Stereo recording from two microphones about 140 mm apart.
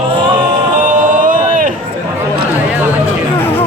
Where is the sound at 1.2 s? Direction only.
75° right (ahead or behind).